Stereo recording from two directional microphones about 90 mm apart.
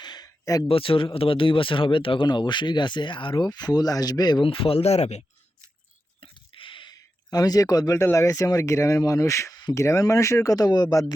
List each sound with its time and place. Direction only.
0.0 s a sound: 50° left (ahead or behind)
0.7 s speech: 85° left
3.4 s speech: 50° left (ahead or behind)
4.4 s speech: 85° left
6.1 s a sound: 70° left (ahead or behind)
6.9 s speech: 45° left (ahead or behind)